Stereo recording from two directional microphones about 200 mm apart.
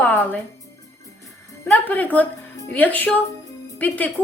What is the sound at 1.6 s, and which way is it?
A woman's voice, 5° left (ahead or behind).